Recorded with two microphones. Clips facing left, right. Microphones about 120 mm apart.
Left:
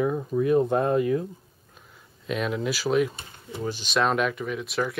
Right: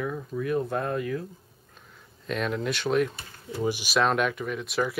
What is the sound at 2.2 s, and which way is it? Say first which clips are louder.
Speech: left 1 dB; 5° left (ahead or behind).